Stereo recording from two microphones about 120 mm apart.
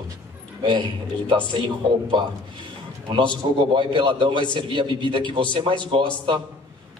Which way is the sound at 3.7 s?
45° right (ahead or behind).